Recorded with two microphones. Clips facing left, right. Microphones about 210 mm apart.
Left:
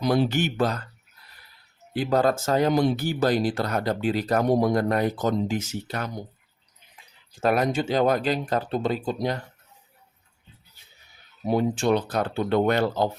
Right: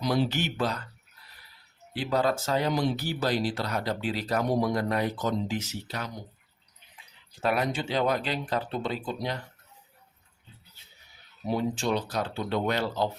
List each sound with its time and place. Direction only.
0.0 s speech: 50° left (ahead or behind)
2.0 s speech: 45° left (ahead or behind)
7.4 s speech: 45° left (ahead or behind)
11.4 s speech: 50° left (ahead or behind)